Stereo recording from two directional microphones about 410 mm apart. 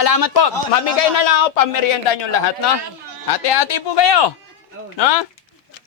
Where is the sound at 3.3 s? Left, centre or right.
Left.